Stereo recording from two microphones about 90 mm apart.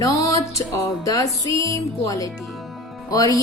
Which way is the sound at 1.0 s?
40° left (ahead or behind).